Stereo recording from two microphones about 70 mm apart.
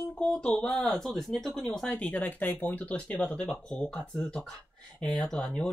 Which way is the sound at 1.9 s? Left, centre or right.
Left.